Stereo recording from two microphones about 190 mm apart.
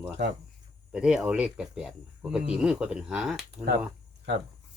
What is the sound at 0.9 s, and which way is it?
Speech, 5° right (ahead or behind).